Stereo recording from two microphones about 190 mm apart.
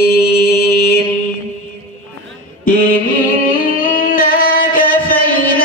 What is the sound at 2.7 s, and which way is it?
Music, 45° left (ahead or behind).